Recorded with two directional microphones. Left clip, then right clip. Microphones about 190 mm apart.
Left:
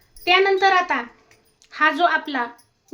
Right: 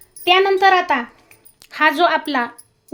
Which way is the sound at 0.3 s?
35° right (ahead or behind).